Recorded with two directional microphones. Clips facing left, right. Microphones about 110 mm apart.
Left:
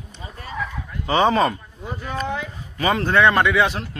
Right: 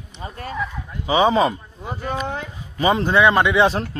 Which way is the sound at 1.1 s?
10° right (ahead or behind).